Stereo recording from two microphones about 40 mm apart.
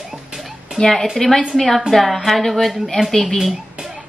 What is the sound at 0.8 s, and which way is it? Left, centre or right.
A woman's voice, centre.